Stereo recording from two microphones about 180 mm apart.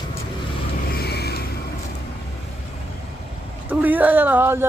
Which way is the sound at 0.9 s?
65° left (ahead or behind).